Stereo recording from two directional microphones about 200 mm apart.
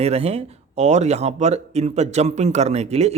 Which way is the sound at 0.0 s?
30° right (ahead or behind).